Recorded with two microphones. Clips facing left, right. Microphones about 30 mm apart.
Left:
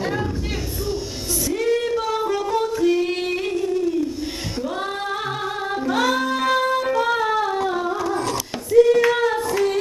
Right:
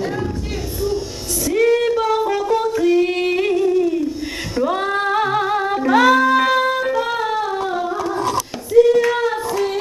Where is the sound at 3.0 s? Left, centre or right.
Centre.